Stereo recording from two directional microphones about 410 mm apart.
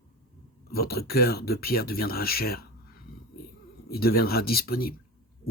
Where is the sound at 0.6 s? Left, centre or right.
Left.